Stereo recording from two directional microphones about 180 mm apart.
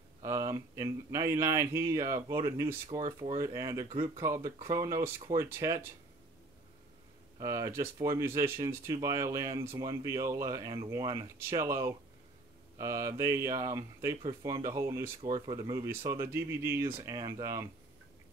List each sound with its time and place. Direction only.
0.2 s speech: 15° right (ahead or behind)
3.3 s speech: 20° right (ahead or behind)
7.3 s speech: 20° right (ahead or behind)